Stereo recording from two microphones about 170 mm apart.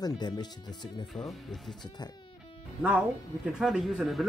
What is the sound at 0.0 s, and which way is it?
Speech, 25° left (ahead or behind).